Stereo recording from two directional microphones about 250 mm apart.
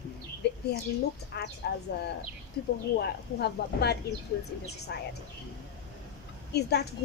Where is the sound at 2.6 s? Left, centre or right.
Left.